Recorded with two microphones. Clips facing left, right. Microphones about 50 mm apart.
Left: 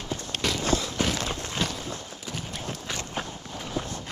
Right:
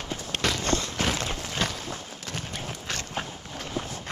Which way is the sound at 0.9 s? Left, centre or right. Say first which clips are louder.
Even; centre.